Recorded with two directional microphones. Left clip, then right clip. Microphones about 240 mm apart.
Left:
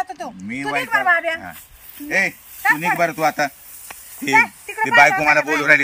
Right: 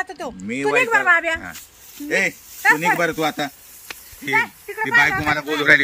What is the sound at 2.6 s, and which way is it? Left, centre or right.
Speech, centre.